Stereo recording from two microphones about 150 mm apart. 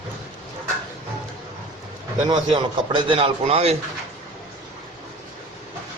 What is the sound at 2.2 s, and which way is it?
A man's voice, 30° right (ahead or behind).